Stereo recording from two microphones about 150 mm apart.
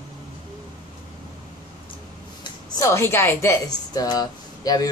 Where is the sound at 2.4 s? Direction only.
20° left (ahead or behind).